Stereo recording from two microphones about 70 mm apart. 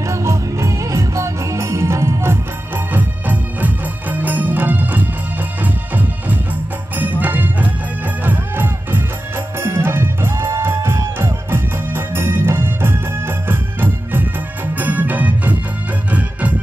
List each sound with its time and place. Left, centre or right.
0.0 s music: right
2.9 s music: right